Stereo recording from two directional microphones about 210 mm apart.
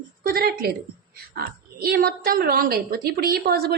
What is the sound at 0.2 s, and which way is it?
A woman's voice, 45° right (ahead or behind).